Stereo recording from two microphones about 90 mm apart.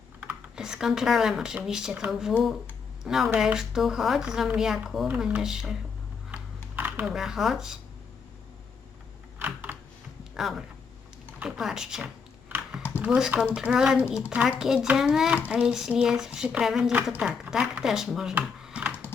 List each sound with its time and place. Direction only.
0.5 s speech: 5° right (ahead or behind)
6.3 s computer keyboard: 20° right (ahead or behind)
7.0 s speech: 5° right (ahead or behind)
9.4 s computer keyboard: 20° right (ahead or behind)
10.4 s speech: 5° right (ahead or behind)
18.6 s typing: 15° right (ahead or behind)